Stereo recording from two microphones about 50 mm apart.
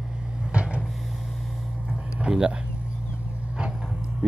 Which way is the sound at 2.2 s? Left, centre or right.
Centre.